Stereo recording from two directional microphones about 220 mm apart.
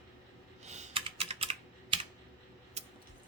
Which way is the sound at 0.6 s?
30° right (ahead or behind).